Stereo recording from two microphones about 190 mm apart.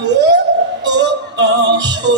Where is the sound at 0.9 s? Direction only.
65° right (ahead or behind).